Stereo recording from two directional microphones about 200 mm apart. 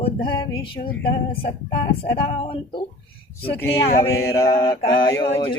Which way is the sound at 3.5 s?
50° left (ahead or behind).